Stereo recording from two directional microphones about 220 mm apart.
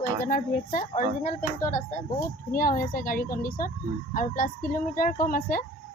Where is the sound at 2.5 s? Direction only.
40° left (ahead or behind).